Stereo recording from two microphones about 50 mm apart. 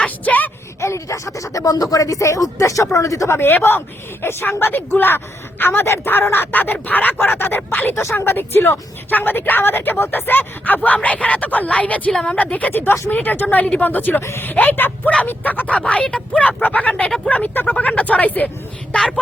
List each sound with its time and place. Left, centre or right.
0.0 s a sound: left
0.8 s speech: left
3.3 s speech: left
6.5 s speech: left
10.8 s speech: left
12.8 s speech: left
14.2 s speech: left
14.4 s speech: left
15.7 s speech: left